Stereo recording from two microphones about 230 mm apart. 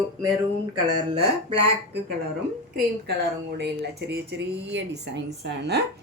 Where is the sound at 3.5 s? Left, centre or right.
Right.